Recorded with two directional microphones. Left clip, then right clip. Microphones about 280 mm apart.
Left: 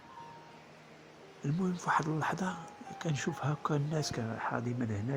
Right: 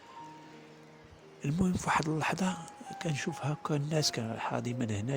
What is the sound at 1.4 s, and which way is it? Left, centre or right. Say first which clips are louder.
Speech: right 3 dB; right.